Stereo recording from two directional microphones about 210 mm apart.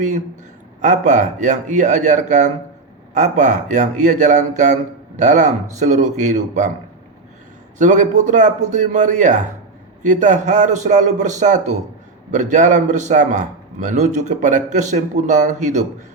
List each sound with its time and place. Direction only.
0.8 s a man's voice: 35° right (ahead or behind)
7.8 s a man's voice: 35° right (ahead or behind)